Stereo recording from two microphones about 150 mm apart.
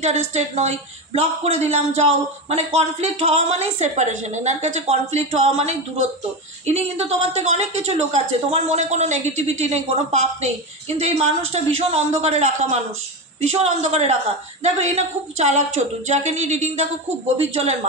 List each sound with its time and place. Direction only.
0.0 s speech: 50° right (ahead or behind)